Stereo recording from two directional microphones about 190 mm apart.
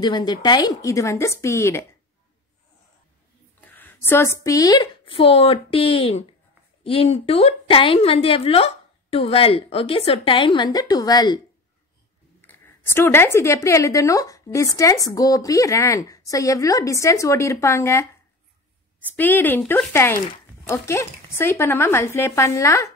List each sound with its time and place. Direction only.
0.0 s a woman's voice: 20° left (ahead or behind)
3.6 s a woman's voice: 10° left (ahead or behind)
12.4 s a woman's voice: 10° left (ahead or behind)